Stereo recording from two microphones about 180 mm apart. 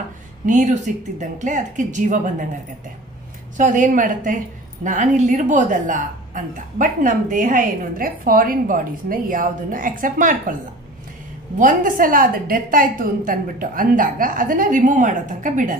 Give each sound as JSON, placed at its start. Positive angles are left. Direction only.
{"t": 0.5, "sound": "a woman's voice", "side_deg": -40}
{"t": 3.5, "sound": "a woman's voice", "side_deg": -45}
{"t": 11.5, "sound": "a woman's voice", "side_deg": -45}